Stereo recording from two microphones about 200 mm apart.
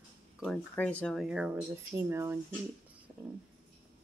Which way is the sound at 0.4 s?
5° left (ahead or behind).